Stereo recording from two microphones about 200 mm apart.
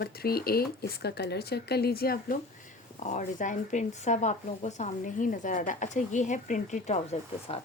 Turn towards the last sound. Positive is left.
turn(degrees=30)  # may be behind; listen again after turning